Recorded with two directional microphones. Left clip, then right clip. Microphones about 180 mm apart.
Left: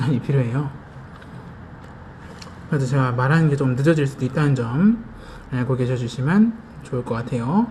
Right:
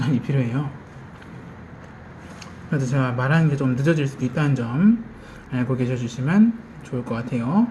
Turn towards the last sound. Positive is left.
turn(degrees=25)  # may be behind; listen again after turning